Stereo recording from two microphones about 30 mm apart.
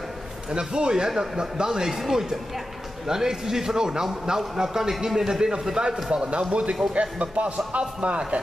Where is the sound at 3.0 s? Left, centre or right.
Centre.